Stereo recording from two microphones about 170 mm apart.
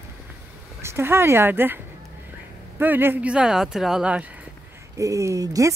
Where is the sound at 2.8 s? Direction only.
10° right (ahead or behind).